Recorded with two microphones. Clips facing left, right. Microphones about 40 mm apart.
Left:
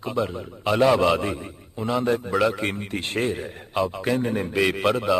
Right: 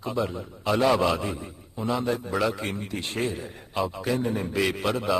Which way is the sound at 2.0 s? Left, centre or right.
Left.